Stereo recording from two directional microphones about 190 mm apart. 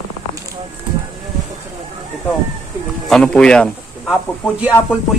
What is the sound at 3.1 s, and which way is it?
Speech, 5° left (ahead or behind).